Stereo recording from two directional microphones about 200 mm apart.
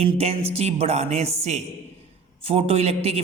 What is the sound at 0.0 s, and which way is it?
A man's voice, 30° right (ahead or behind).